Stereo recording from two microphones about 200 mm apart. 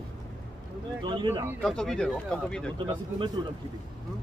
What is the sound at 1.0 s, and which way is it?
Speech, 20° right (ahead or behind).